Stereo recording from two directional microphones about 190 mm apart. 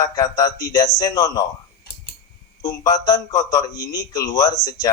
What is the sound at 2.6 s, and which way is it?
Speech, 20° left (ahead or behind).